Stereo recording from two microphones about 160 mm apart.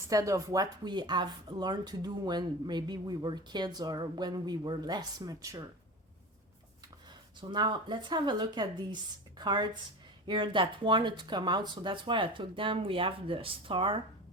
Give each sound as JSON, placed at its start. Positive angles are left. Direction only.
{"t": 0.1, "sound": "speech", "side_deg": -20}
{"t": 7.4, "sound": "speech", "side_deg": -30}